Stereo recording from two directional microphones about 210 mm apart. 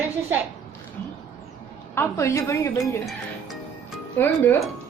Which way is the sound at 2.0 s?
15° left (ahead or behind).